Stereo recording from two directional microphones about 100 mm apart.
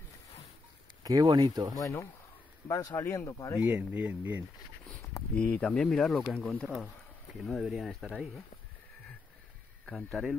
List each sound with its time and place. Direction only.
1.0 s speech: 40° right (ahead or behind)
1.8 s speech: 30° left (ahead or behind)
3.5 s speech: 15° right (ahead or behind)
5.3 s speech: 15° left (ahead or behind)
10.2 s speech: centre (ahead or behind)